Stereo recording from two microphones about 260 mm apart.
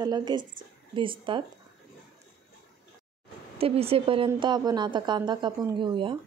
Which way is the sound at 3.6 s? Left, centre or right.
Right.